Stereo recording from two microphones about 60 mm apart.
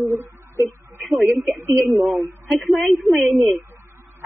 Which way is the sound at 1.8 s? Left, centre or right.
Centre.